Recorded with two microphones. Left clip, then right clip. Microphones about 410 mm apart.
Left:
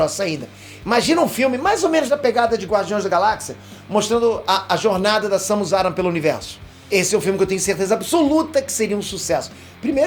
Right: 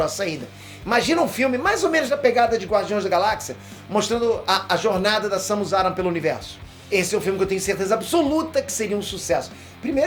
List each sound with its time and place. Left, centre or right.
0.0 s speech: centre